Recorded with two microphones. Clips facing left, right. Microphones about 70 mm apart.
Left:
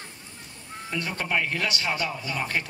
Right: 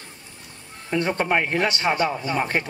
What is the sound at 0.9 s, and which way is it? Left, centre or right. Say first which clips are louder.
Speech: right 7 dB; right.